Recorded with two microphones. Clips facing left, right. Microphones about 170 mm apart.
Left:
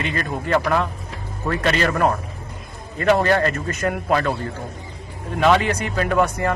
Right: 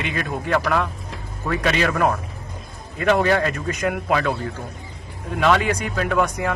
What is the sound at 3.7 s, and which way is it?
Speech, 15° right (ahead or behind).